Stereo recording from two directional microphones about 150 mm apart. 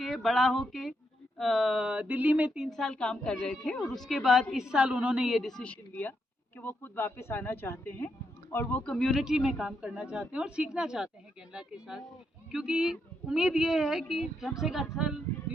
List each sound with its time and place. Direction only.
0.0 s a woman's voice: centre (ahead or behind)
2.6 s a woman's voice: 5° left (ahead or behind)